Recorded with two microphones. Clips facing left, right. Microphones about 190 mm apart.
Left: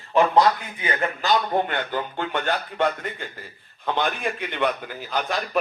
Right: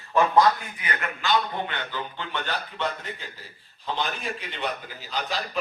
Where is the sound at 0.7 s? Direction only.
30° left (ahead or behind).